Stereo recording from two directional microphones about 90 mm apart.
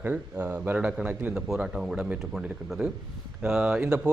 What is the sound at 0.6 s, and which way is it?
Speech, 20° right (ahead or behind).